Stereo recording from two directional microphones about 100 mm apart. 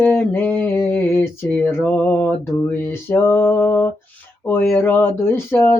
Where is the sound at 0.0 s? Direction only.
15° left (ahead or behind).